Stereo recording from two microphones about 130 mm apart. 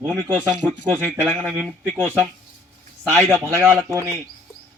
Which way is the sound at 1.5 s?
20° left (ahead or behind).